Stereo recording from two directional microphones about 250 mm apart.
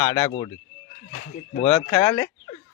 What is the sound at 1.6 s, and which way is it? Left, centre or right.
Speech, left.